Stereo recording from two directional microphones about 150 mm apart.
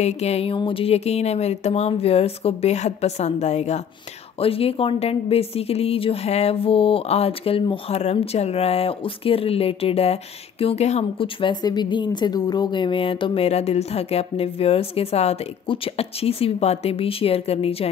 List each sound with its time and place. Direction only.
0.0 s a woman's voice: 45° left (ahead or behind)